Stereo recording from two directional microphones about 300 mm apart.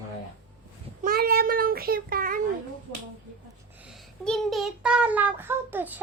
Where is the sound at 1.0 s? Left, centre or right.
Right.